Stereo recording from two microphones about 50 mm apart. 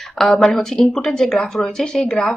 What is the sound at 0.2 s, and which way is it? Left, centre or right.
A woman's voice, centre.